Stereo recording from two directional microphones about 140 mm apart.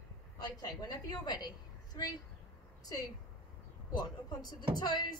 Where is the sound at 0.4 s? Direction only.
30° left (ahead or behind).